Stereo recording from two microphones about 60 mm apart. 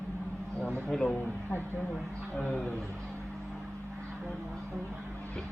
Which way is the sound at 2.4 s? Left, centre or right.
Centre.